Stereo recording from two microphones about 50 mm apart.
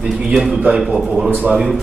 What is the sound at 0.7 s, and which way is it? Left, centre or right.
Speech, centre.